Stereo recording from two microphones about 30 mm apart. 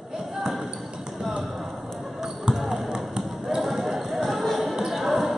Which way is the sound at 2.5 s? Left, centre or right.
Centre.